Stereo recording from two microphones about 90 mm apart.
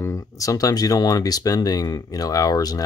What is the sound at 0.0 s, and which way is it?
Speech, 35° left (ahead or behind).